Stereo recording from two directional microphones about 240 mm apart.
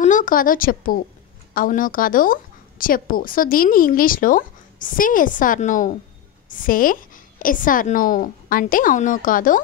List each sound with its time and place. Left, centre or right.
0.0 s speech: left